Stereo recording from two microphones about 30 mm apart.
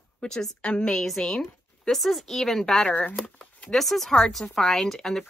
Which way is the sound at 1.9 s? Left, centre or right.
Centre.